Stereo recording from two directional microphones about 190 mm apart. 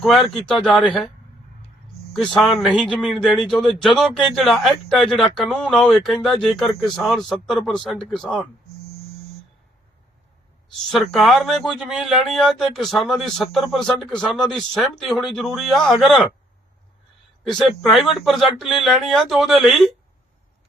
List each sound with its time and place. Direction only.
0.0 s a man's voice: centre (ahead or behind)
2.1 s a man's voice: centre (ahead or behind)
10.9 s a man's voice: centre (ahead or behind)
17.5 s a man's voice: centre (ahead or behind)